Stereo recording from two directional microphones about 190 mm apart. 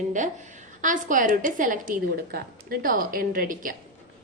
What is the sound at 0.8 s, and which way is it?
A woman's voice, 45° right (ahead or behind).